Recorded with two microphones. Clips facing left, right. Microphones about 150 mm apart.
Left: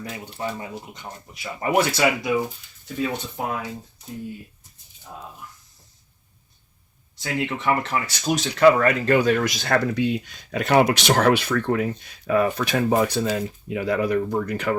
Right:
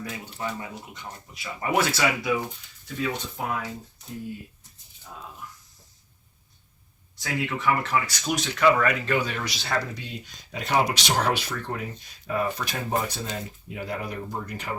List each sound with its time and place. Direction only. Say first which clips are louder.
0.0 s speech: left 3 dB; 30° left (ahead or behind)
7.2 s speech: left 3 dB; 25° left (ahead or behind); by 14.8 s 75° left (ahead or behind)